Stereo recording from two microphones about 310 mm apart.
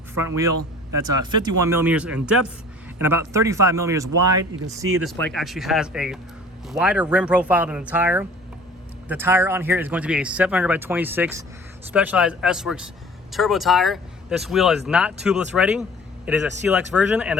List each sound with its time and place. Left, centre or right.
0.1 s a man's voice: centre
5.0 s a man's voice: centre